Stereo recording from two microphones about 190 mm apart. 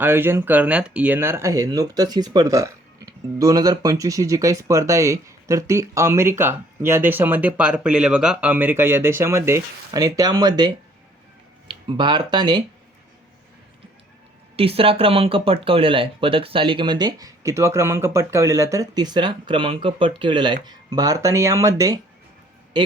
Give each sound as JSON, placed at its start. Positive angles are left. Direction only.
{"t": 0.0, "sound": "speech", "side_deg": -10}
{"t": 14.5, "sound": "speech", "side_deg": -30}